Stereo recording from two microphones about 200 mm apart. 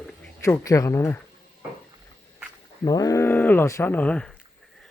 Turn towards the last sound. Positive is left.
turn(degrees=5)  # may be behind; listen again after turning